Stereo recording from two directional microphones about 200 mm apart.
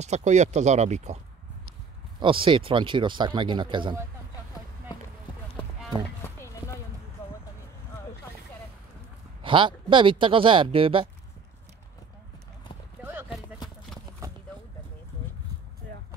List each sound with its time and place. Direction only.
0.0 s speech: 35° right (ahead or behind)
6.2 s clip-clop: 15° left (ahead or behind)
9.4 s speech: 25° right (ahead or behind)
13.0 s clip-clop: 10° right (ahead or behind)
14.2 s a sound: 15° right (ahead or behind)